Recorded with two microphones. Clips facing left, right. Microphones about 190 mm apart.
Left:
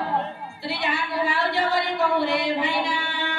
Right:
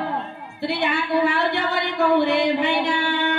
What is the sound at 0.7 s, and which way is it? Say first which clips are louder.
A woman's voice: right 5 dB; 65° right (ahead or behind).